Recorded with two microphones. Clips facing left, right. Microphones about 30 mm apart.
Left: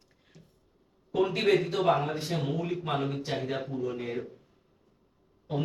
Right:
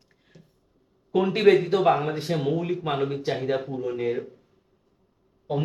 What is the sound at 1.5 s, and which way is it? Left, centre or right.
Speech, right.